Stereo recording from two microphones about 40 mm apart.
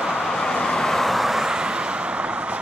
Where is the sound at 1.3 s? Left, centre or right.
Centre.